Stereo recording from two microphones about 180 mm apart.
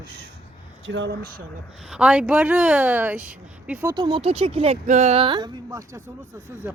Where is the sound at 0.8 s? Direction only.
85° right; by 1.4 s 60° right (ahead or behind).